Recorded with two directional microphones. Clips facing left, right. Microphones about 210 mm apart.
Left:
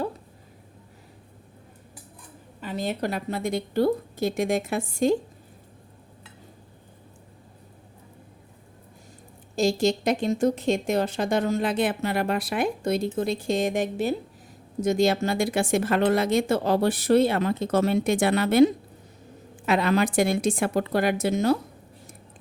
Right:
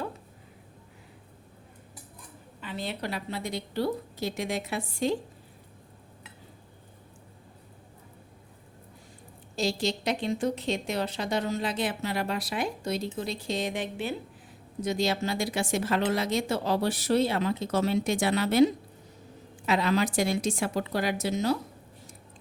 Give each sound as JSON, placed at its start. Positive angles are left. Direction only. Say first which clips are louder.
{"t": 2.6, "sound": "a woman's voice", "louder": "left 6 dB", "side_deg": 45}
{"t": 9.6, "sound": "a woman's voice", "louder": "left 7 dB", "side_deg": 45}